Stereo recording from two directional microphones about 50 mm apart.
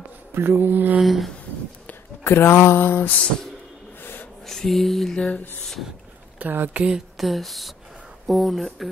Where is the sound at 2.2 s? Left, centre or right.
Left.